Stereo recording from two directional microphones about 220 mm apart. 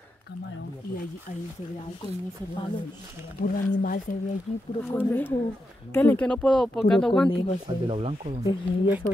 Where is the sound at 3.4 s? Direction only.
40° left (ahead or behind).